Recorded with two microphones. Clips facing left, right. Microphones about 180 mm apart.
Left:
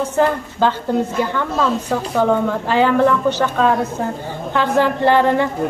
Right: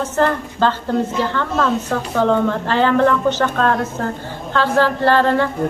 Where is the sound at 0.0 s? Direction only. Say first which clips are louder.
Left 1 dB; 10° left (ahead or behind).